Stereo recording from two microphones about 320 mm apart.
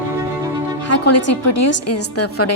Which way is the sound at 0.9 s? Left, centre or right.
Left.